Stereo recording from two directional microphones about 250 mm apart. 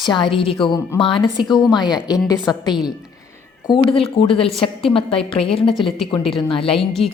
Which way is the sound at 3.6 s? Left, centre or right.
Centre.